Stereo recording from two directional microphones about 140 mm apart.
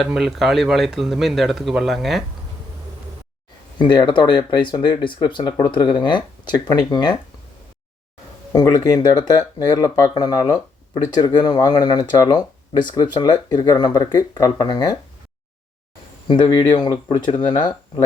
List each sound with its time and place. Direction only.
0.0 s speech: centre (ahead or behind)
3.8 s speech: 30° left (ahead or behind)
8.5 s speech: 25° left (ahead or behind)
16.2 s speech: 30° left (ahead or behind)